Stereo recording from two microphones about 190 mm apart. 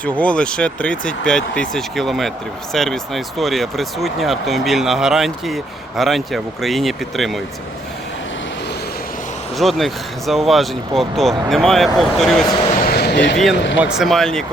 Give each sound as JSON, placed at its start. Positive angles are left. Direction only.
{"t": 0.0, "sound": "speech", "side_deg": 5}
{"t": 9.6, "sound": "speech", "side_deg": 0}
{"t": 12.7, "sound": "basketball bounce", "side_deg": 50}
{"t": 13.8, "sound": "speech", "side_deg": 0}